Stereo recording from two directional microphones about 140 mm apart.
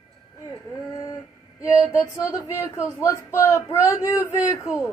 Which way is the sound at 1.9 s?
20° left (ahead or behind).